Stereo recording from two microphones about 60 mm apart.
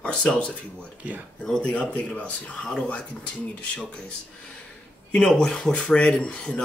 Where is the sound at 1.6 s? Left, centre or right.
Centre.